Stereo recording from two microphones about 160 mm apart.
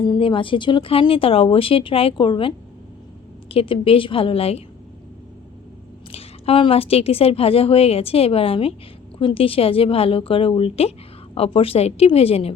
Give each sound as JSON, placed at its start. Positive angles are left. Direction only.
{"t": 0.0, "sound": "a woman's voice", "side_deg": 30}
{"t": 3.5, "sound": "a woman's voice", "side_deg": 35}
{"t": 6.1, "sound": "a woman's voice", "side_deg": 40}